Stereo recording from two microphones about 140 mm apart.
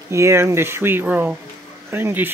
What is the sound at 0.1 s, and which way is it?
Speech, 20° right (ahead or behind).